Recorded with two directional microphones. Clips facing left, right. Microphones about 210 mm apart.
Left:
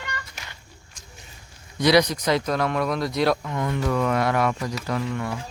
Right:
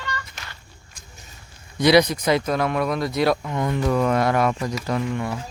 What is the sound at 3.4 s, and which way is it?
Speech, 25° right (ahead or behind).